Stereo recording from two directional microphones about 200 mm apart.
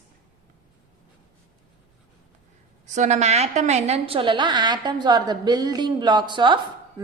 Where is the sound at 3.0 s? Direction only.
35° right (ahead or behind).